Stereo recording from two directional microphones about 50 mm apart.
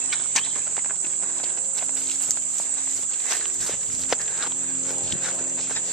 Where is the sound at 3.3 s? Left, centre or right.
Centre.